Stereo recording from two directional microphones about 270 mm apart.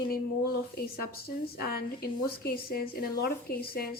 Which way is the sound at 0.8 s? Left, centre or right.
Left.